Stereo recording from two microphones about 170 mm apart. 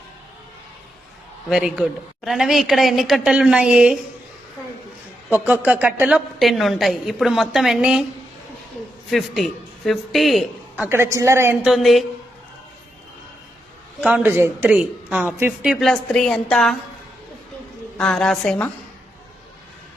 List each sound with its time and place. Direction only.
1.5 s a woman's voice: 5° right (ahead or behind)
5.3 s a woman's voice: 10° right (ahead or behind)
9.0 s a woman's voice: centre (ahead or behind)
10.8 s a woman's voice: 15° right (ahead or behind)
11.6 s a woman's voice: centre (ahead or behind)
14.0 s a woman's voice: 10° right (ahead or behind)
17.9 s a woman's voice: 5° left (ahead or behind)